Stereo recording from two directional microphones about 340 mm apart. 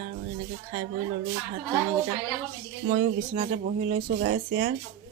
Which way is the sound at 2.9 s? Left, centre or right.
Right.